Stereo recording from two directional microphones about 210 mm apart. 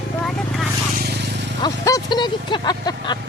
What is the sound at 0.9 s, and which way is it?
Vehicle, 50° right (ahead or behind).